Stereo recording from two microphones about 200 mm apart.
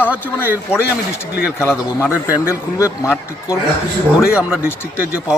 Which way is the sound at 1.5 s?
10° left (ahead or behind).